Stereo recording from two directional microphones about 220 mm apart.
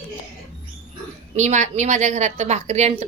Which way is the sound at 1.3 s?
30° right (ahead or behind).